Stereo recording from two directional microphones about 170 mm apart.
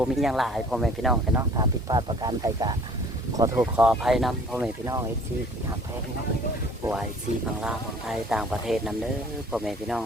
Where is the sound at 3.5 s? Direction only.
5° right (ahead or behind).